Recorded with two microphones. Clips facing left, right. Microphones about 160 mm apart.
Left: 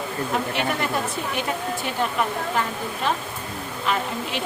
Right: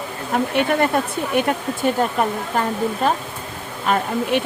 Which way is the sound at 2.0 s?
40° right (ahead or behind).